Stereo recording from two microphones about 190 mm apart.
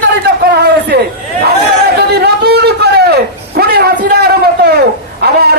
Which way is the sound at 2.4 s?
55° right (ahead or behind).